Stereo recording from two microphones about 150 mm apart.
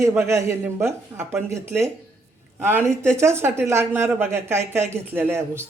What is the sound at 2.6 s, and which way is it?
Speech, 15° right (ahead or behind).